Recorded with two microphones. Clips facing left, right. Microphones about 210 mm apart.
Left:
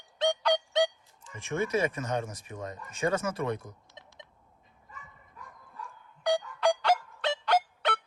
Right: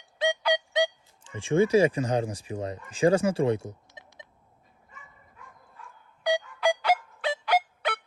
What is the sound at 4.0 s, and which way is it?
Telephone dialing, 5° right (ahead or behind).